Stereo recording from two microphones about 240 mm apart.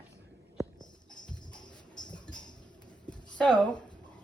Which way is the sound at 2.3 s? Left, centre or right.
Centre.